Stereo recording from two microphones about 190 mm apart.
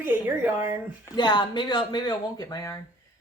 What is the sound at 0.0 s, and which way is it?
Speech, 10° right (ahead or behind).